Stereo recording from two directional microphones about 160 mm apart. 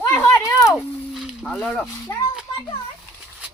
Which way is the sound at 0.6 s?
Centre (ahead or behind).